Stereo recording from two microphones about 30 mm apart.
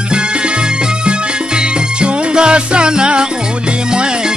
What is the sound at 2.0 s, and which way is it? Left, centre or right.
Music, right.